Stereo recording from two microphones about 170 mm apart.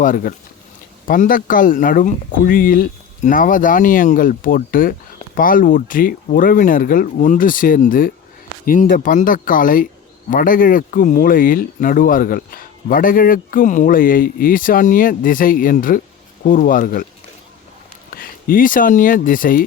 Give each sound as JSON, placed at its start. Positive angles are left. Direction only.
{"t": 0.0, "sound": "speech", "side_deg": 55}
{"t": 18.1, "sound": "speech", "side_deg": 55}